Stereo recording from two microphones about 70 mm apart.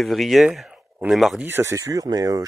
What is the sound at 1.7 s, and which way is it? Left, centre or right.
Speech, right.